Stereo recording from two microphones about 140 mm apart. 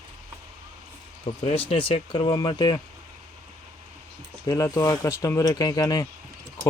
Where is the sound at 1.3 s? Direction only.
40° left (ahead or behind).